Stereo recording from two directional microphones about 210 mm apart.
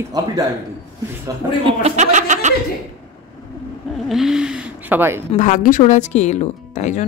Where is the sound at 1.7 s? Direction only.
30° right (ahead or behind).